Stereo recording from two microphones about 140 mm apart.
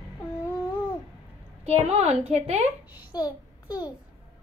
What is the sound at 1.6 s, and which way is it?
A woman's voice, 50° right (ahead or behind).